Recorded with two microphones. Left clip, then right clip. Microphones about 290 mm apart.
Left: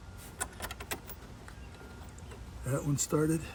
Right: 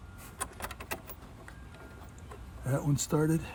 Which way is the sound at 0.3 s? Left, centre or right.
Centre.